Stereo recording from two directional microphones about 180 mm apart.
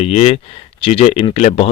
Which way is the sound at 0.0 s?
35° left (ahead or behind).